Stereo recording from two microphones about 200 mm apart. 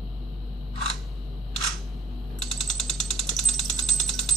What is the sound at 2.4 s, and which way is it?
Ratchet, centre (ahead or behind).